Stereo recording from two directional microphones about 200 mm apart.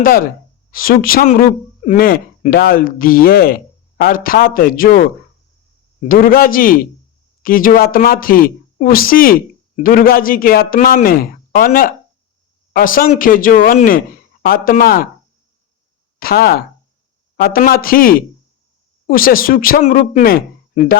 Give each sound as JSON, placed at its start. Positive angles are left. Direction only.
{"t": 0.0, "sound": "a woman's voice", "side_deg": 45}
{"t": 16.2, "sound": "a woman's voice", "side_deg": 50}